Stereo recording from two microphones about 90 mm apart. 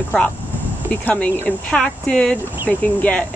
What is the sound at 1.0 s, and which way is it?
Speech, 15° left (ahead or behind).